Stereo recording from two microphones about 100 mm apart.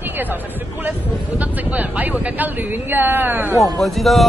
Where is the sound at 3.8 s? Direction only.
Centre (ahead or behind).